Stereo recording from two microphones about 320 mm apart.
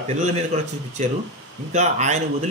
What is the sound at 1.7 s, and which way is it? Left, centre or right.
Speech, right.